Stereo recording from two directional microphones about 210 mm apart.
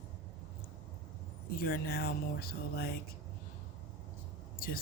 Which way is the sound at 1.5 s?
45° left (ahead or behind).